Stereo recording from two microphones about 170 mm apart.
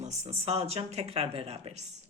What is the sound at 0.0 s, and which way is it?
Speech, 35° right (ahead or behind).